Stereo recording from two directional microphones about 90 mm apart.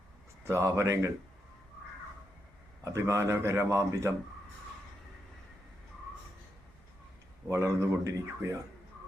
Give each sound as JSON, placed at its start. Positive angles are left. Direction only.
{"t": 0.4, "sound": "speech", "side_deg": -30}
{"t": 2.8, "sound": "speech", "side_deg": -30}
{"t": 7.5, "sound": "speech", "side_deg": -35}